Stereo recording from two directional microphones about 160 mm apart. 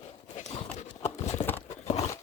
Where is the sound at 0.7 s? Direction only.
45° left (ahead or behind).